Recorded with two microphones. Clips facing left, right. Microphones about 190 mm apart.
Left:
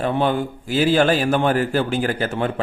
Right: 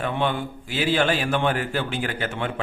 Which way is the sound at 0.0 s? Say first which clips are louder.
Left 5 dB; 40° left (ahead or behind).